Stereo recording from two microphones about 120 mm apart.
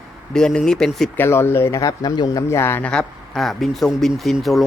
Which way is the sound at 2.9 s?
5° left (ahead or behind).